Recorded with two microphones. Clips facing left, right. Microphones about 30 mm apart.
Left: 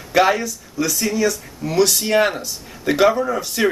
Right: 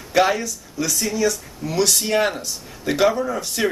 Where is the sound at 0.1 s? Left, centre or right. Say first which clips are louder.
Left 2 dB; centre.